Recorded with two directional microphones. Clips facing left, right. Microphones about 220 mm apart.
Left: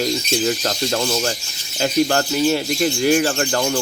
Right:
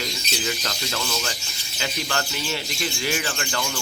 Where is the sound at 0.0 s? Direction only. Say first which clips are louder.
Left 10 dB; 45° left (ahead or behind).